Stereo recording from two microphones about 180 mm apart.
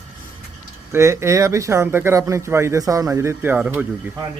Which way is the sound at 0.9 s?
15° right (ahead or behind).